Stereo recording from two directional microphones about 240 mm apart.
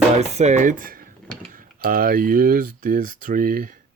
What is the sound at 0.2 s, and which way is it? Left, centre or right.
Speech, right.